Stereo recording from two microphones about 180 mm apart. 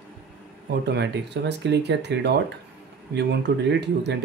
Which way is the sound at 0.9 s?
75° right (ahead or behind).